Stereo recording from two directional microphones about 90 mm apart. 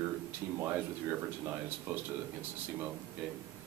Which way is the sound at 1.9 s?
25° right (ahead or behind).